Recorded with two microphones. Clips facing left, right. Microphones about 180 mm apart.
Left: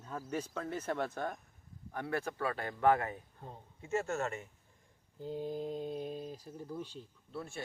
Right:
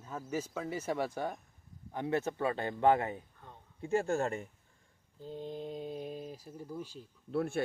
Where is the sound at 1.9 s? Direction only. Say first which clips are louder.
Right 4 dB; 20° right (ahead or behind).